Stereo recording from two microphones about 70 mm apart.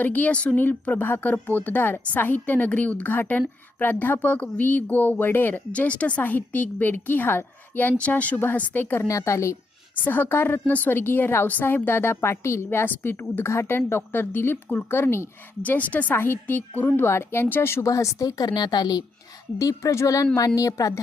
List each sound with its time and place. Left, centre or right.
0.0 s a woman's voice: left
9.0 s a woman's voice: left
9.9 s a woman's voice: left
15.6 s a woman's voice: left
17.1 s a woman's voice: left
17.8 s a woman's voice: left
19.5 s a woman's voice: left